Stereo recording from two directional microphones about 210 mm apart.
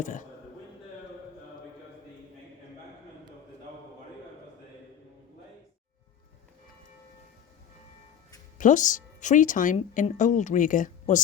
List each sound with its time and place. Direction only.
0.0 s speech: 40° left (ahead or behind)
8.5 s speech: 35° left (ahead or behind)